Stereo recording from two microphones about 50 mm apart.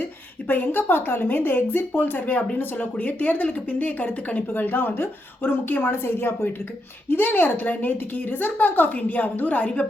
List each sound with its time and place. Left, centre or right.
0.4 s speech: left